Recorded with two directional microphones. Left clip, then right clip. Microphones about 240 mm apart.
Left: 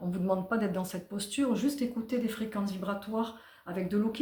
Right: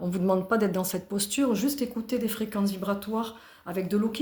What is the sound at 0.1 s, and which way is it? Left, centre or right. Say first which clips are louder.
Speech: right 5 dB; right.